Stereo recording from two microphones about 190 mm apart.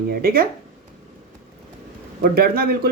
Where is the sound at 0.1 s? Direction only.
50° right (ahead or behind).